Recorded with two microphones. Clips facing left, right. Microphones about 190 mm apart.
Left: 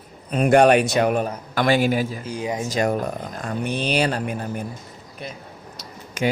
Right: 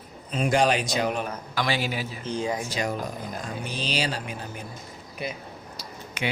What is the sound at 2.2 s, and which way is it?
Speech, 15° left (ahead or behind).